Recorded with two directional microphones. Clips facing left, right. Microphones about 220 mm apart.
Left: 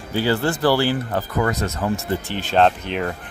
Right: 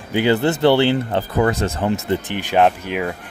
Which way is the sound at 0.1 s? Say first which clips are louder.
Right 4 dB; 20° right (ahead or behind).